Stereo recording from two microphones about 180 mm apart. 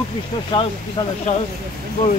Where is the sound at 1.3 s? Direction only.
40° left (ahead or behind).